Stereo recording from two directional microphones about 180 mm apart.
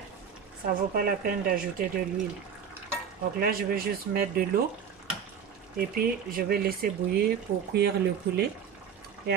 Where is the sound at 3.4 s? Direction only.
55° right (ahead or behind).